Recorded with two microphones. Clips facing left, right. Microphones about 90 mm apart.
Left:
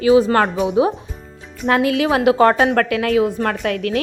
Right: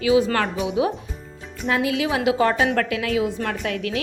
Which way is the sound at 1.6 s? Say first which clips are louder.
Left 6 dB; 50° left (ahead or behind).